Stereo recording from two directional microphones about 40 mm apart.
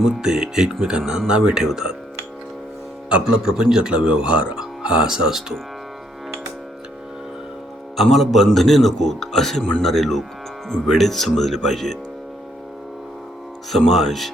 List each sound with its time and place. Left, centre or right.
0.0 s speech: centre
3.1 s speech: right
8.1 s speech: centre
13.7 s speech: centre